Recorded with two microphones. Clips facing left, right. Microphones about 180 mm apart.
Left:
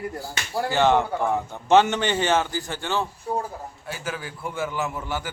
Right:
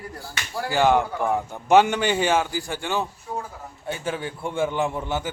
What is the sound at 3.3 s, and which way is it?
Speech, 35° left (ahead or behind).